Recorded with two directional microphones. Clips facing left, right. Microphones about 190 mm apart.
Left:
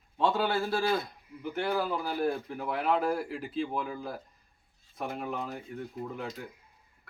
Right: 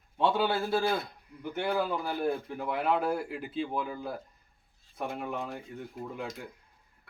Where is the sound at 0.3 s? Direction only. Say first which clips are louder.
Right 1 dB; 5° right (ahead or behind).